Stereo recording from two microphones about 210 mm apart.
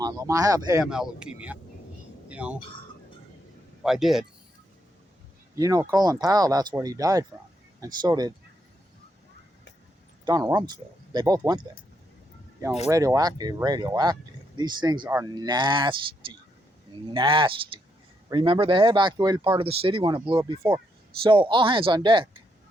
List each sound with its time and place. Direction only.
0.0 s speech: 15° right (ahead or behind)
0.9 s speech: 5° right (ahead or behind)
2.3 s speech: 5° right (ahead or behind)
3.8 s speech: centre (ahead or behind)
5.5 s speech: 15° right (ahead or behind)
10.2 s speech: 20° right (ahead or behind)
12.9 s speech: 15° right (ahead or behind)